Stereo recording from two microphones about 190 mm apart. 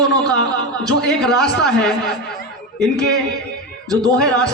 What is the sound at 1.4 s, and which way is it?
Speech, centre (ahead or behind).